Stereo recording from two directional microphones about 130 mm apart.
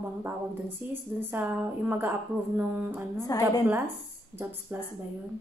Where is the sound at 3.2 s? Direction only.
30° left (ahead or behind).